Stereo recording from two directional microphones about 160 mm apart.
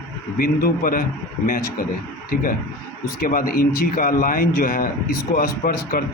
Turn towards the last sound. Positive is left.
turn(degrees=70)  # may be behind; listen again after turning